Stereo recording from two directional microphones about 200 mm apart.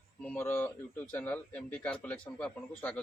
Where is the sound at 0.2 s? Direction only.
5° left (ahead or behind).